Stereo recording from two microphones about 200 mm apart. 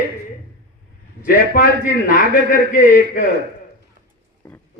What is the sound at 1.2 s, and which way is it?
A man's voice, 50° left (ahead or behind).